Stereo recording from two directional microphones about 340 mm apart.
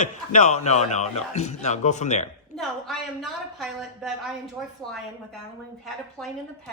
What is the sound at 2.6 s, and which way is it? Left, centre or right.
A woman's voice, centre.